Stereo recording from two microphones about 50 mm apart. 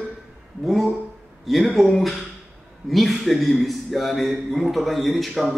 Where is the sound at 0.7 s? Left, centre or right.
Centre.